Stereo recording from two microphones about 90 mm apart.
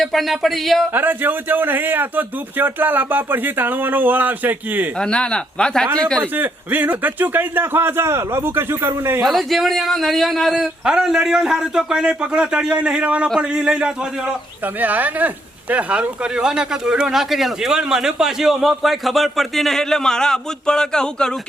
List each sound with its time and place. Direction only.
0.0 s speech: centre (ahead or behind)
0.9 s speech: 20° right (ahead or behind)
4.9 s speech: 10° left (ahead or behind)
6.3 s speech: 20° right (ahead or behind)
9.2 s a man's voice: centre (ahead or behind)